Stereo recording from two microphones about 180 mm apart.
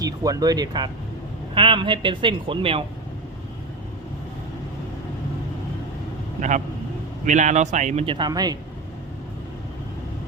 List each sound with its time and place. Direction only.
0.0 s speech: 20° right (ahead or behind)
7.3 s speech: 40° right (ahead or behind); by 8.5 s 20° right (ahead or behind)